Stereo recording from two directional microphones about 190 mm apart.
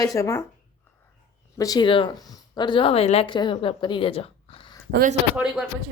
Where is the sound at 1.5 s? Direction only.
20° left (ahead or behind).